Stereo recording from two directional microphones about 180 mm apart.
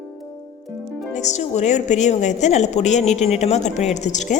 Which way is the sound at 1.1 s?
40° left (ahead or behind).